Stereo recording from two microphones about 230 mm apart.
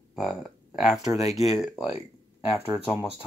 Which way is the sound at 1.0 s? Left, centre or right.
Left.